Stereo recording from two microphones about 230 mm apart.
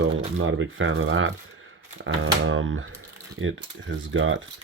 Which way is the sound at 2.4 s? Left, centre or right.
Right.